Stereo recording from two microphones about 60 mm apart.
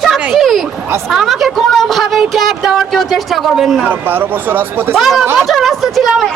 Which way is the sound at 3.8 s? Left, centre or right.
Right.